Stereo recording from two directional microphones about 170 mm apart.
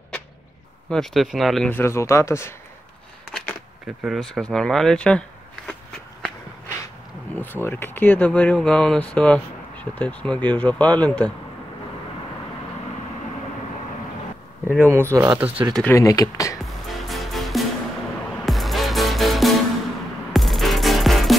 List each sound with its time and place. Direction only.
0.8 s speech: centre (ahead or behind)
3.3 s speech: centre (ahead or behind)
7.3 s speech: 10° left (ahead or behind)
14.7 s speech: 10° right (ahead or behind)
15.7 s speech: 10° left (ahead or behind)
16.0 s speech: 20° left (ahead or behind)
16.6 s music: centre (ahead or behind)